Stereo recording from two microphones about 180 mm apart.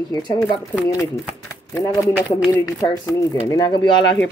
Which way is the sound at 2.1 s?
5° right (ahead or behind).